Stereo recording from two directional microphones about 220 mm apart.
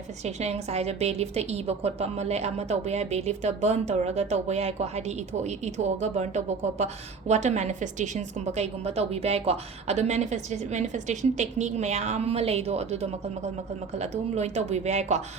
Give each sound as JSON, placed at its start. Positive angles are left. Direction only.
{"t": 0.3, "sound": "a woman's voice", "side_deg": -30}